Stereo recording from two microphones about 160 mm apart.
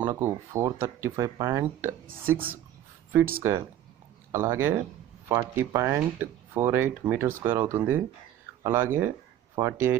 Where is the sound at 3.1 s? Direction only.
15° right (ahead or behind).